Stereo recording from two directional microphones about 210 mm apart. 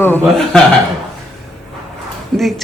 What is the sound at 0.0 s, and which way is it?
Speech, 10° left (ahead or behind).